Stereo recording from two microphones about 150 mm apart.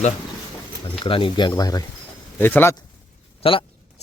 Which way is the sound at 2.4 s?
15° left (ahead or behind).